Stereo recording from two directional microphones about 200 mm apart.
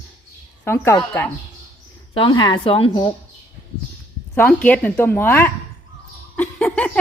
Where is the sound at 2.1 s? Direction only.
20° left (ahead or behind).